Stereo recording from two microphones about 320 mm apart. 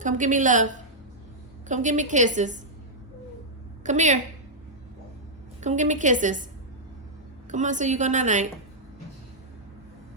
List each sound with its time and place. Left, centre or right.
0.0 s a woman's voice: right
3.8 s a woman's voice: right
5.5 s a woman's voice: right
7.5 s a woman's voice: right